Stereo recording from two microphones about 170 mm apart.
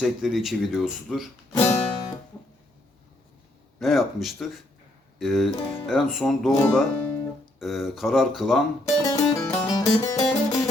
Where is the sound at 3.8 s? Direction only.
Centre (ahead or behind).